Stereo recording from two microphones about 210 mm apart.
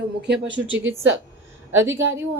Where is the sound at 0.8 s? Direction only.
65° right (ahead or behind).